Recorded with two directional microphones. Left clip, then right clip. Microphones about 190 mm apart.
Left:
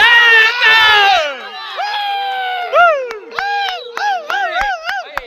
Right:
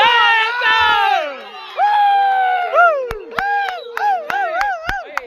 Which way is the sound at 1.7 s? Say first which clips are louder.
Right 6 dB; 50° right (ahead or behind).